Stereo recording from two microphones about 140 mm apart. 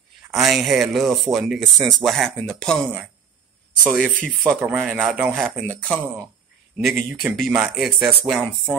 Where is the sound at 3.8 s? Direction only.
10° right (ahead or behind).